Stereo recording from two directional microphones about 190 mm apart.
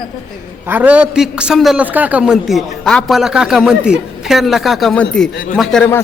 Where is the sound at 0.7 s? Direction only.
5° right (ahead or behind).